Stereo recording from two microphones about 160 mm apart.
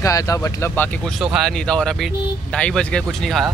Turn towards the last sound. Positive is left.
turn(degrees=0)  # may be behind; listen again after turning